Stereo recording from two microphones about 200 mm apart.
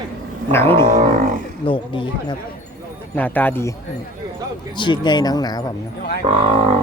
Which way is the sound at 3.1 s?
10° left (ahead or behind).